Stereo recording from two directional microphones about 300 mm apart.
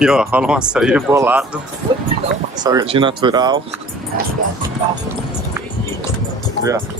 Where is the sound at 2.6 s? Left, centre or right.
Centre.